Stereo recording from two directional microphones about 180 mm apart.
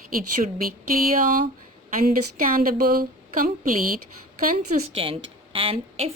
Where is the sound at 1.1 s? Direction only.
50° right (ahead or behind).